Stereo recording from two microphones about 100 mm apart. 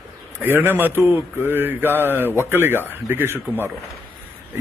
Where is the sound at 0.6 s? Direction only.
20° right (ahead or behind).